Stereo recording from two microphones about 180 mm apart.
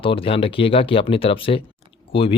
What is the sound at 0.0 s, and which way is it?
Speech, 30° left (ahead or behind).